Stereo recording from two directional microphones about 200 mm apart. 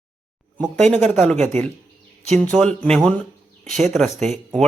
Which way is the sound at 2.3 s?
5° left (ahead or behind).